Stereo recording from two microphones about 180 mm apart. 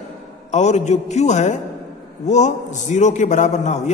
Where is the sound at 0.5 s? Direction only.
40° left (ahead or behind).